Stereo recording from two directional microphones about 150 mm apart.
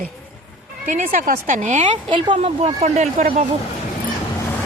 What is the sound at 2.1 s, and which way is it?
Speech, 35° right (ahead or behind).